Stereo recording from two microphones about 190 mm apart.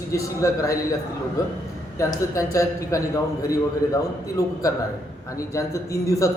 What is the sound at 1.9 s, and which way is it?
A man's voice, 15° left (ahead or behind).